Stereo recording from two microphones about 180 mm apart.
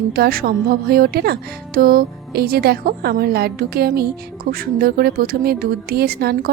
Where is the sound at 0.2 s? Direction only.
55° right (ahead or behind).